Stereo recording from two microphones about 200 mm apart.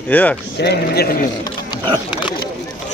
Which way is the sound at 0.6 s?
55° left (ahead or behind).